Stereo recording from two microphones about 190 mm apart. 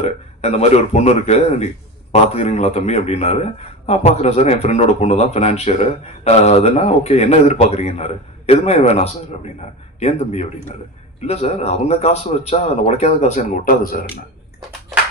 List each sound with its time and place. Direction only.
0.4 s speech: 35° left (ahead or behind)